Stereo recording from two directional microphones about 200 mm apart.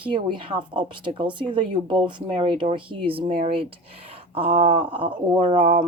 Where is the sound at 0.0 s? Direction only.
25° right (ahead or behind).